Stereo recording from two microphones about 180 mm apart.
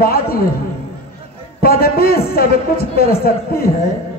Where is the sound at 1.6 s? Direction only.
55° left (ahead or behind).